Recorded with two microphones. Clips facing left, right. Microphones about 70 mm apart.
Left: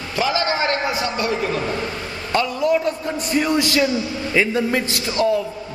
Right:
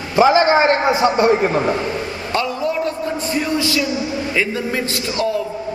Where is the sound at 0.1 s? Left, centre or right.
Right.